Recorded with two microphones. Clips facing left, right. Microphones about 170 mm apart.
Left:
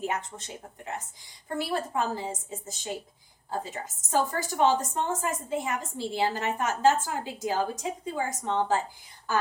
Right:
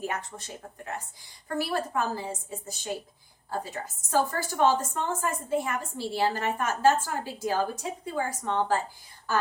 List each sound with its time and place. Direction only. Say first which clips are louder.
0.0 s a woman's voice: left 2 dB; 20° left (ahead or behind)
1.5 s a woman's voice: even; 20° left (ahead or behind)